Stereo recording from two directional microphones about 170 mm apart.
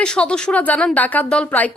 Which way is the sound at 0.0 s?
5° left (ahead or behind).